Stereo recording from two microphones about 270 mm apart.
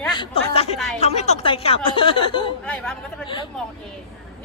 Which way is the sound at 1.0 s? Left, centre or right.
Left.